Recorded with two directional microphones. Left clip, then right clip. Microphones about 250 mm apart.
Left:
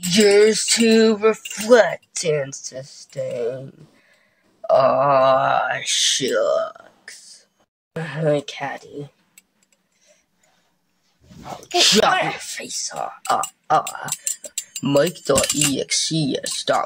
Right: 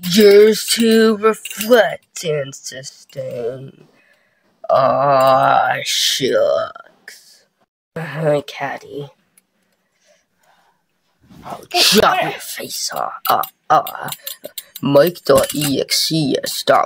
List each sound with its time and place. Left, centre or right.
0.0 s speech: centre
4.6 s speech: centre
11.4 s speech: right
15.4 s speech: centre
15.7 s speech: right